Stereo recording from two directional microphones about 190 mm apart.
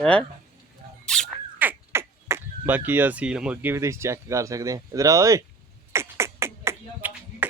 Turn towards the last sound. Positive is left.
turn(degrees=-10)  # may be behind; listen again after turning